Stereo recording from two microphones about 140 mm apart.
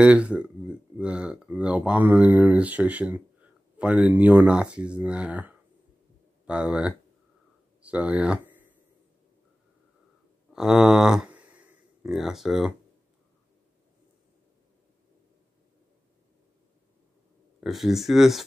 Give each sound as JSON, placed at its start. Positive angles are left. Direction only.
{"t": 0.0, "sound": "speech", "side_deg": -10}
{"t": 10.5, "sound": "a sound", "side_deg": -5}
{"t": 12.1, "sound": "speech", "side_deg": 0}
{"t": 17.6, "sound": "speech", "side_deg": 0}